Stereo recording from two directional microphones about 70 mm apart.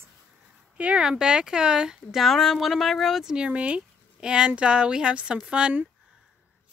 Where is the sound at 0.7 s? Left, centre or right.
Centre.